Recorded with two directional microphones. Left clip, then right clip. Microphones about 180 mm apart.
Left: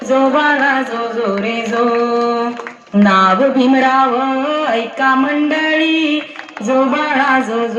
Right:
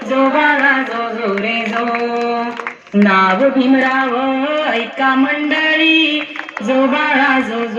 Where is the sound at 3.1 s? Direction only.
45° left (ahead or behind).